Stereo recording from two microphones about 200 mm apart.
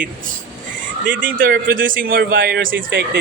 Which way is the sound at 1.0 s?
45° right (ahead or behind).